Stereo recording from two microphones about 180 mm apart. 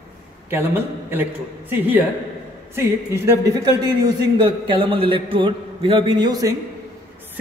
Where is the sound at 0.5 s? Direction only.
10° right (ahead or behind).